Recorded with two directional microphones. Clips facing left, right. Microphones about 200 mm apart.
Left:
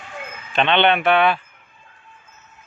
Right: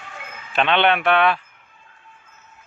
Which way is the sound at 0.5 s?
Centre (ahead or behind).